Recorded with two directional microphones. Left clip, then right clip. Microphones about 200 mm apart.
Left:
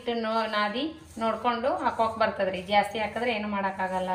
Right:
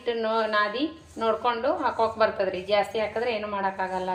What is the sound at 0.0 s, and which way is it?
A woman's voice, 45° right (ahead or behind).